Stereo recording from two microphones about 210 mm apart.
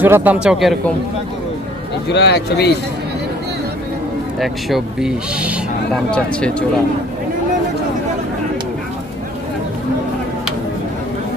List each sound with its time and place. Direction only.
0.0 s speech: 10° right (ahead or behind)
2.0 s speech: 55° left (ahead or behind)
4.4 s speech: centre (ahead or behind)